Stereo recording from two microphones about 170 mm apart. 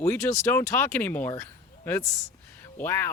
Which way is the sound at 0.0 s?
15° left (ahead or behind).